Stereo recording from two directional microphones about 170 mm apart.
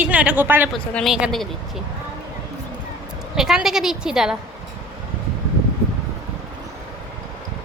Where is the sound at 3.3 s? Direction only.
Centre (ahead or behind).